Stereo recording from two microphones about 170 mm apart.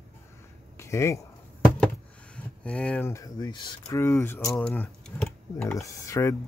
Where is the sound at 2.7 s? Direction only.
5° left (ahead or behind).